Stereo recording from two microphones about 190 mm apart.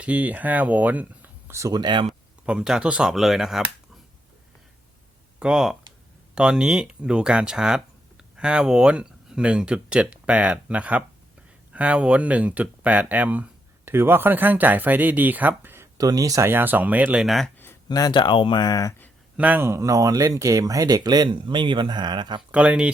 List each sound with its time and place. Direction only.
0.0 s speech: 5° right (ahead or behind); by 2.0 s 25° right (ahead or behind)
2.0 s speech: 5° right (ahead or behind)
5.4 s speech: 5° right (ahead or behind)
17.8 s speech: 20° left (ahead or behind)
19.4 s speech: 10° right (ahead or behind)
22.4 s speech: 5° right (ahead or behind)